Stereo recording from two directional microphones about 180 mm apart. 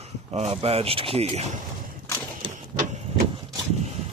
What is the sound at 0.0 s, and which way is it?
Speech, 35° right (ahead or behind).